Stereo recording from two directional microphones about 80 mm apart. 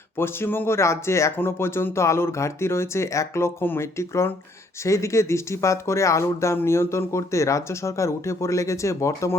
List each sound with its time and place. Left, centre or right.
0.2 s speech: left